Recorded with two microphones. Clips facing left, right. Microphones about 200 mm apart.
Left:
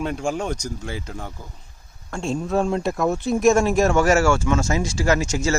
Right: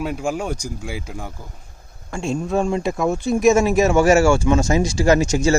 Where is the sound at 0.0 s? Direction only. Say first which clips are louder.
Right 1 dB; 5° right (ahead or behind).